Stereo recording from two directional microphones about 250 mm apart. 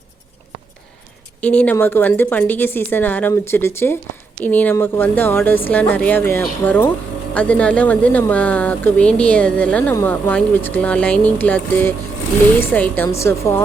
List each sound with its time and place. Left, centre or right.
1.4 s a woman's voice: centre